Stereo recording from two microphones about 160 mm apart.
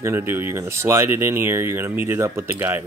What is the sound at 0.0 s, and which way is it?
Speech, 15° right (ahead or behind).